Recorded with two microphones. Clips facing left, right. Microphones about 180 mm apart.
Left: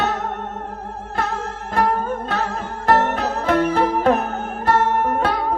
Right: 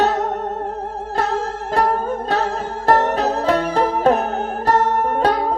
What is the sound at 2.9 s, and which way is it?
Music, 35° right (ahead or behind).